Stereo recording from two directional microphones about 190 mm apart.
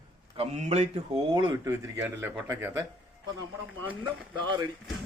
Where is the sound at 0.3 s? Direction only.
35° right (ahead or behind).